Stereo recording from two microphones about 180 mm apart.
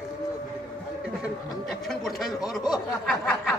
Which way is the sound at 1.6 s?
Centre (ahead or behind).